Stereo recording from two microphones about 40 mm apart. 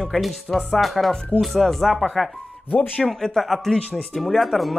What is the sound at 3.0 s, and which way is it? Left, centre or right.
Speech, centre.